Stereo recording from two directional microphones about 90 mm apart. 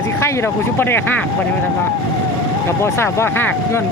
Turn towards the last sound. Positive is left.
turn(degrees=25)  # may be behind; listen again after turning